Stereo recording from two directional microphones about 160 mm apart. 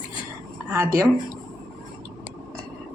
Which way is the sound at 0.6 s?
15° right (ahead or behind).